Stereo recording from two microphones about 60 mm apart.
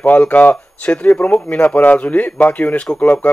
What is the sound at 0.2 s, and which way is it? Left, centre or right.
Speech, left.